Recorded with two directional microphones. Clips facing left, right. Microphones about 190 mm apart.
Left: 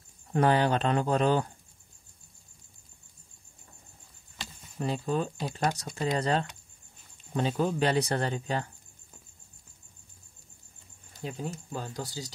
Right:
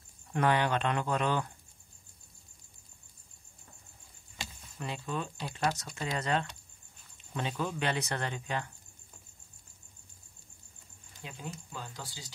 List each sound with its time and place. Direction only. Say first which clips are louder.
0.3 s speech: left 4 dB; 35° left (ahead or behind)
4.7 s speech: left 7 dB; 35° left (ahead or behind)
11.1 s speech: left 8 dB; 40° left (ahead or behind)